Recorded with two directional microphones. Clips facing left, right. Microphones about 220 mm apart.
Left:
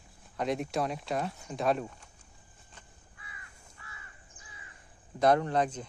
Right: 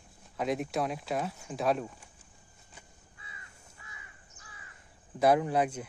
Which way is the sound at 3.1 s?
25° right (ahead or behind).